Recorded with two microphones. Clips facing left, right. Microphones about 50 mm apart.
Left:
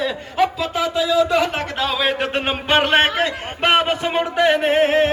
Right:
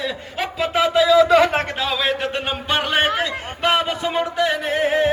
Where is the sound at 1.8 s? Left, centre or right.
Centre.